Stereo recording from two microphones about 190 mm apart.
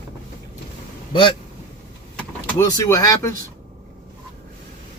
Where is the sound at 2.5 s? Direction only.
15° left (ahead or behind).